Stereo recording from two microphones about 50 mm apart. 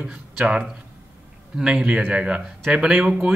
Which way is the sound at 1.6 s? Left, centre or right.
Centre.